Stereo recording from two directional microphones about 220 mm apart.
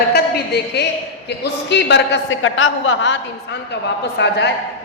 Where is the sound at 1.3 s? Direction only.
50° left (ahead or behind).